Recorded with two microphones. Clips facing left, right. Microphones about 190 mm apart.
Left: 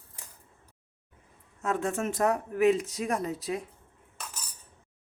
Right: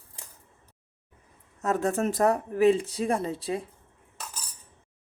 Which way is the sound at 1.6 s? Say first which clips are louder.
Right 4 dB; 40° right (ahead or behind).